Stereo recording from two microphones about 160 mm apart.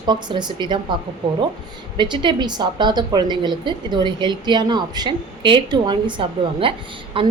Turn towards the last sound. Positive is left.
turn(degrees=-35)  # may be behind; listen again after turning